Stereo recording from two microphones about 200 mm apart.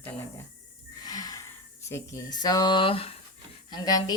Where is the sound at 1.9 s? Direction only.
15° left (ahead or behind).